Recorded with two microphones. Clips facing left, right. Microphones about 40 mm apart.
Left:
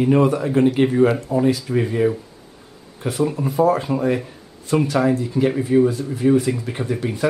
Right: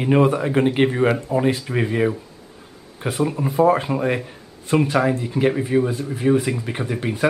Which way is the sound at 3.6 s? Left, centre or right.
Right.